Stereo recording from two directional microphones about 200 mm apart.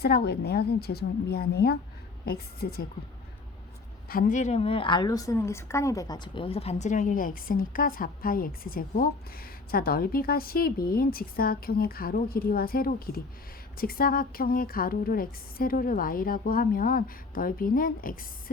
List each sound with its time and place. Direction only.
0.0 s a woman's voice: 55° left (ahead or behind)
4.1 s a woman's voice: 45° left (ahead or behind)